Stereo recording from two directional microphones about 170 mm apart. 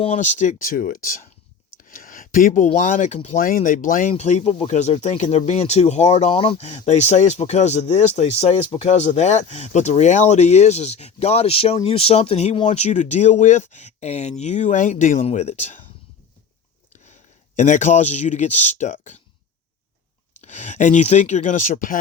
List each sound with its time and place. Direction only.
0.0 s speech: 40° left (ahead or behind)
1.8 s a sound: 55° left (ahead or behind)
2.7 s speech: 50° left (ahead or behind)
16.9 s a sound: 45° left (ahead or behind)
17.6 s speech: 45° left (ahead or behind)
20.3 s speech: 45° left (ahead or behind)